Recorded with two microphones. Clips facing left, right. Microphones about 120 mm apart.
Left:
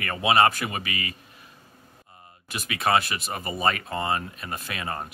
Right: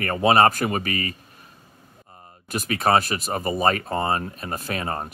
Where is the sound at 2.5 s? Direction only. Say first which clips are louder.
Right 4 dB; 40° right (ahead or behind).